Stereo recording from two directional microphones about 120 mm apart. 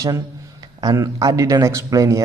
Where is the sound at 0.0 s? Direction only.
35° right (ahead or behind).